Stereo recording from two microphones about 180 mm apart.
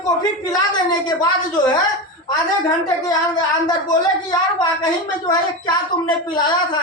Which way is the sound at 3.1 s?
20° left (ahead or behind).